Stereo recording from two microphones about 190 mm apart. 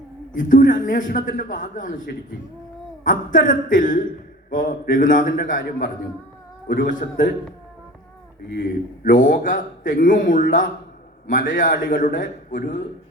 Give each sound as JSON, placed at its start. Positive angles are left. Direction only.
{"t": 0.3, "sound": "a man's voice", "side_deg": 45}
{"t": 8.5, "sound": "a man's voice", "side_deg": 45}